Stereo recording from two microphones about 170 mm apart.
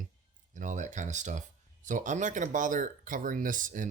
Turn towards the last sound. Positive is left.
turn(degrees=-50)  # may be behind; listen again after turning